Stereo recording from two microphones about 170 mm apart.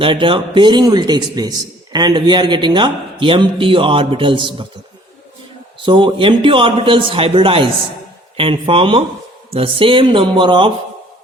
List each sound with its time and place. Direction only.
0.0 s speech: 30° right (ahead or behind)
5.8 s a man's voice: 30° right (ahead or behind)